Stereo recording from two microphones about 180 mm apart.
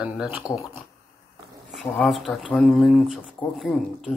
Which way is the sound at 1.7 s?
Centre (ahead or behind).